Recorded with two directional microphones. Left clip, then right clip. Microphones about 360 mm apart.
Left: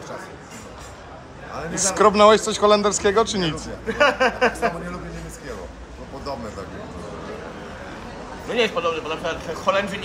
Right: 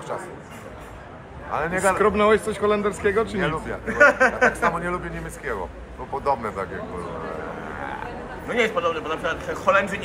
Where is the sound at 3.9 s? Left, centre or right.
Left.